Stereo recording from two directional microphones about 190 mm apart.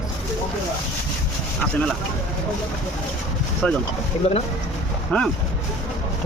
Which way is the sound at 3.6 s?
5° left (ahead or behind).